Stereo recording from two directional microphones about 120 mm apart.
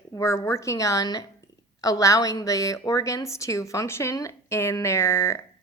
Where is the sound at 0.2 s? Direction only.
25° left (ahead or behind).